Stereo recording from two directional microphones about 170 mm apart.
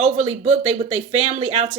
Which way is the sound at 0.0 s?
40° right (ahead or behind).